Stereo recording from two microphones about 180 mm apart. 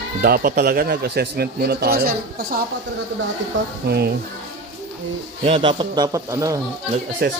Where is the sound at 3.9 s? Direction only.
60° right (ahead or behind).